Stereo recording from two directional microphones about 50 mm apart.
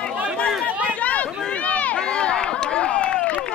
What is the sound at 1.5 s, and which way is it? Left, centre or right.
Run, left.